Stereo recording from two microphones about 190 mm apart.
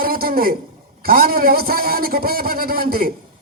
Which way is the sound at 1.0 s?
50° right (ahead or behind).